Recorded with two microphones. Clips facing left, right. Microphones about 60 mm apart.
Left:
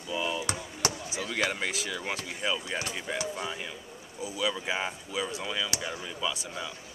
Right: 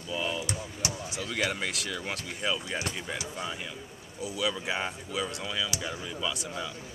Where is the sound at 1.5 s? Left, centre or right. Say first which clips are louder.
Left 1 dB; centre.